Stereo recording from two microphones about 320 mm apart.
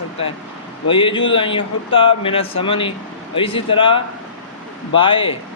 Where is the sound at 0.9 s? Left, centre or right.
Centre.